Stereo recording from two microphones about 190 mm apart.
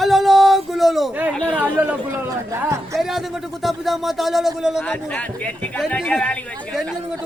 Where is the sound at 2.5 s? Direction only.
15° right (ahead or behind).